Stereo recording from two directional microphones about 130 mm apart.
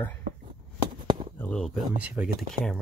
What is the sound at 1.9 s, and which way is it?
Speech, 10° right (ahead or behind).